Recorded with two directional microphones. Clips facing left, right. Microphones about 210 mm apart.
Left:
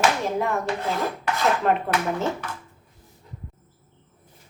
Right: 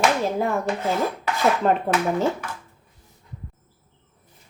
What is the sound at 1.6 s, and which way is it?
Speech, 35° right (ahead or behind).